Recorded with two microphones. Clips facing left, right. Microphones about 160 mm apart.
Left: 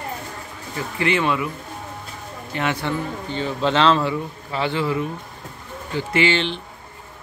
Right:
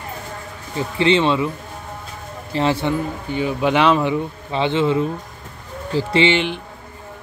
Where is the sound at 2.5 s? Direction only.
30° right (ahead or behind).